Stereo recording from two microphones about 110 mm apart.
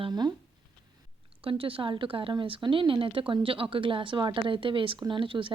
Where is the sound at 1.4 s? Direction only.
55° right (ahead or behind).